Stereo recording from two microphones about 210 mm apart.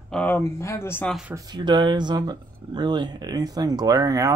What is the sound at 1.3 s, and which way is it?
Speech, 20° right (ahead or behind).